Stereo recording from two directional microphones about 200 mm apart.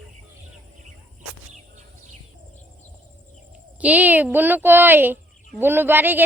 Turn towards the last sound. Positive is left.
turn(degrees=-10)  # may be behind; listen again after turning